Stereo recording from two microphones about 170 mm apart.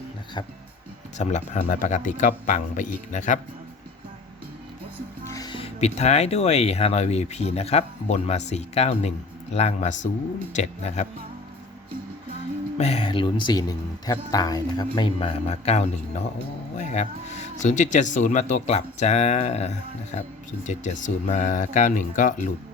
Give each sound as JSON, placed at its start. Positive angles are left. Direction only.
{"t": 1.2, "sound": "speech", "side_deg": 40}
{"t": 5.2, "sound": "speech", "side_deg": 20}
{"t": 12.7, "sound": "speech", "side_deg": 35}